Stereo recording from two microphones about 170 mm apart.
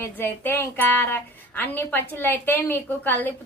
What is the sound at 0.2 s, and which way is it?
Speech, 10° left (ahead or behind).